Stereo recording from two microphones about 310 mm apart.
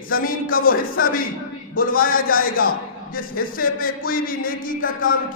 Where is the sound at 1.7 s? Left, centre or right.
Left.